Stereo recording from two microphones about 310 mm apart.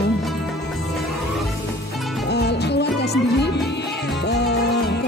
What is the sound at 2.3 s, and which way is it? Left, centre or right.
Music, left.